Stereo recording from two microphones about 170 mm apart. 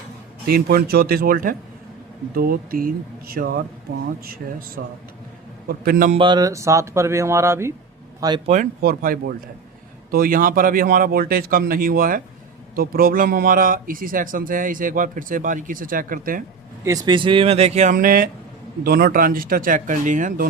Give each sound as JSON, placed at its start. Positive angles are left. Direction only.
{"t": 0.4, "sound": "a man's voice", "side_deg": -65}
{"t": 6.1, "sound": "speech", "side_deg": -25}
{"t": 8.8, "sound": "a man's voice", "side_deg": -60}
{"t": 16.8, "sound": "speech", "side_deg": -20}